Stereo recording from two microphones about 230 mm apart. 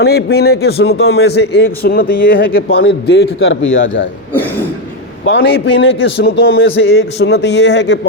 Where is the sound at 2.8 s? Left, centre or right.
Left.